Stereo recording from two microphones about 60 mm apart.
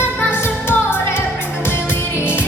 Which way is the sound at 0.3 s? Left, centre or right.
Left.